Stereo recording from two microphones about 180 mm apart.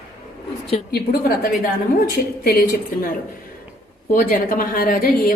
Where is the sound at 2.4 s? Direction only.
55° left (ahead or behind).